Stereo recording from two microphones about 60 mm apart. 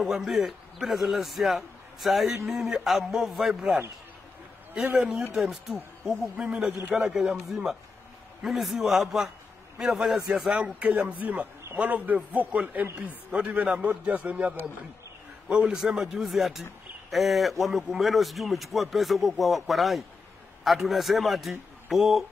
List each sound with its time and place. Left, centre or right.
0.0 s a man's voice: centre
4.8 s a man's voice: right
5.3 s a man's voice: centre
6.3 s a man's voice: centre
7.1 s a man's voice: centre
10.5 s a man's voice: right
15.4 s a man's voice: centre